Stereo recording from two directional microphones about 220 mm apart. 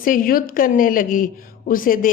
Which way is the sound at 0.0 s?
40° left (ahead or behind).